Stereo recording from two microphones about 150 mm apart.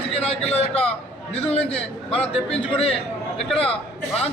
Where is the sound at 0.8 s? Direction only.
45° left (ahead or behind).